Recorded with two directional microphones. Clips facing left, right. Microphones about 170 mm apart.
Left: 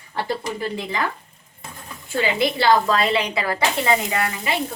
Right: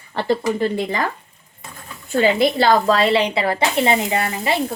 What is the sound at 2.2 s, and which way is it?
Speech, 45° right (ahead or behind).